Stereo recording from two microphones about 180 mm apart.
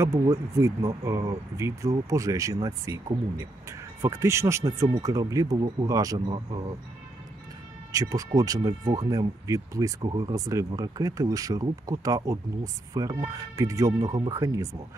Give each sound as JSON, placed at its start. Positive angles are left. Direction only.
{"t": 0.0, "sound": "speech", "side_deg": -15}
{"t": 4.0, "sound": "speech", "side_deg": -15}
{"t": 7.9, "sound": "speech", "side_deg": -20}